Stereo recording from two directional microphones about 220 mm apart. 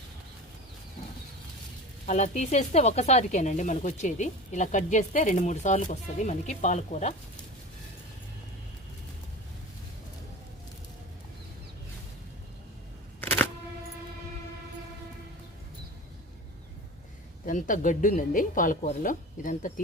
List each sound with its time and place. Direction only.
2.0 s speech: 30° left (ahead or behind)
17.4 s speech: 35° left (ahead or behind)